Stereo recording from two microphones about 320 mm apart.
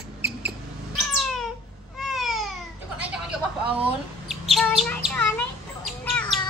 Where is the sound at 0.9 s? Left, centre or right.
Centre.